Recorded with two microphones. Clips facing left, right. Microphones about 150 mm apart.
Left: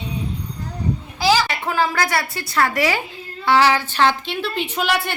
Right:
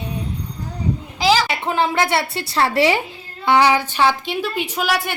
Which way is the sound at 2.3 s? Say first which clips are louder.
Right 2 dB; 30° right (ahead or behind).